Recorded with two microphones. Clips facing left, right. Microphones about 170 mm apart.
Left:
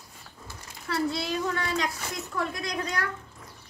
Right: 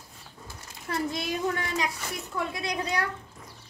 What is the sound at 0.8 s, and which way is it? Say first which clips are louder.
A child's voice: left 2 dB; 15° right (ahead or behind).